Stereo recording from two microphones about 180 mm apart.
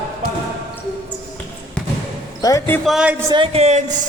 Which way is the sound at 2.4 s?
20° left (ahead or behind).